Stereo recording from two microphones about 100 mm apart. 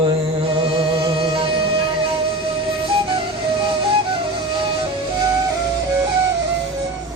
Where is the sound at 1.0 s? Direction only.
55° right (ahead or behind).